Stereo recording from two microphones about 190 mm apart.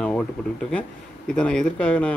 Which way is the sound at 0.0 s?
5° left (ahead or behind).